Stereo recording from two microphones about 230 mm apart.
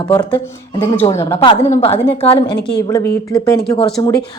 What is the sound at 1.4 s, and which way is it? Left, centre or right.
A woman's voice, left.